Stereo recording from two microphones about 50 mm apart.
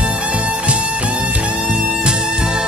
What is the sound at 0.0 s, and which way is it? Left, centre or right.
Music, right.